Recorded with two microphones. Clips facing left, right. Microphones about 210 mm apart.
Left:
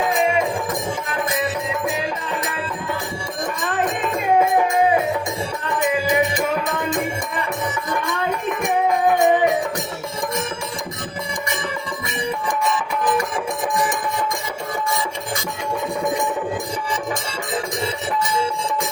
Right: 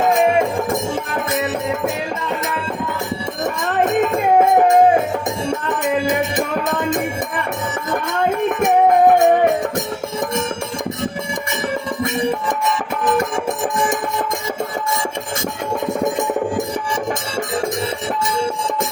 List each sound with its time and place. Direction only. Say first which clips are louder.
0.0 s music: right 4 dB; 45° right (ahead or behind)
4.4 s music: right 6 dB; 45° right (ahead or behind)
7.9 s music: right 7 dB; 55° right (ahead or behind)